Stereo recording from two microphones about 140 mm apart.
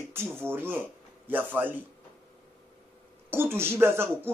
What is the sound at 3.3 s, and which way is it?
Speech, 15° right (ahead or behind).